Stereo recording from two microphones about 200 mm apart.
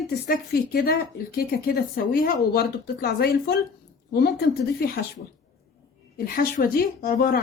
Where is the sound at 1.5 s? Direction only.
50° left (ahead or behind).